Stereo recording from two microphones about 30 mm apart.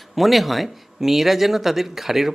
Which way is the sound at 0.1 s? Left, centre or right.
Centre.